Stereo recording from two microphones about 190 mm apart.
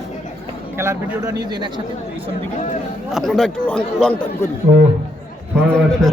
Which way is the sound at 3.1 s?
Centre (ahead or behind).